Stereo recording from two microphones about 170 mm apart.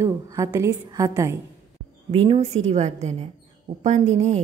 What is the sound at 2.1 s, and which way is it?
A woman's voice, 35° right (ahead or behind).